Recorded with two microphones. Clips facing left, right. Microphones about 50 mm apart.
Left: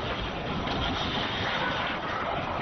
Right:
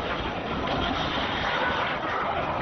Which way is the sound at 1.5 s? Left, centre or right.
Centre.